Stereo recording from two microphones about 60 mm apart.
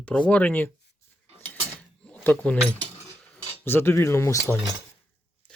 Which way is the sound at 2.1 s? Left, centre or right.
Left.